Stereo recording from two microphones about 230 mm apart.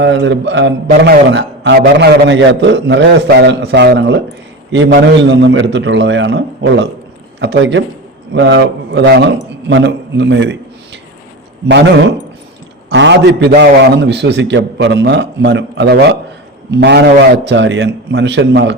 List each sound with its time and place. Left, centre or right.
0.0 s a man's voice: right
12.9 s a man's voice: right